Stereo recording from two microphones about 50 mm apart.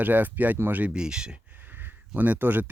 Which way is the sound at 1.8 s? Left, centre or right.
Right.